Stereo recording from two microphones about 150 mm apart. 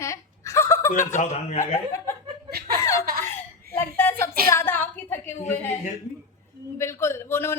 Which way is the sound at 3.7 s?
15° left (ahead or behind).